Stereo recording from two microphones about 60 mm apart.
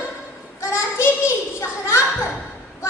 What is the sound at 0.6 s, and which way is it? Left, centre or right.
Child singing, left.